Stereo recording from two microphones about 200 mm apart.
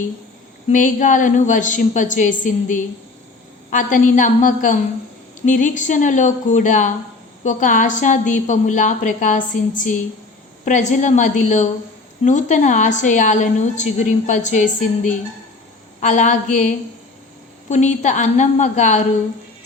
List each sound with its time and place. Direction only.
0.7 s a woman's voice: 40° left (ahead or behind)
10.7 s a woman's voice: 35° left (ahead or behind)
17.7 s a woman's voice: 35° left (ahead or behind)